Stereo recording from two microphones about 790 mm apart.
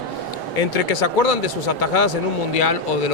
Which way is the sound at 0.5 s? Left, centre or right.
Left.